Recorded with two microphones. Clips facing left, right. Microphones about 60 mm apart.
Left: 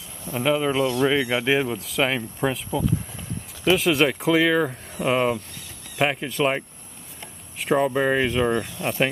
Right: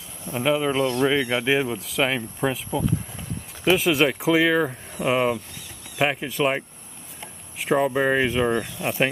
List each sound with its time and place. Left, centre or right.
0.4 s speech: centre
0.7 s speech: right
1.0 s speech: centre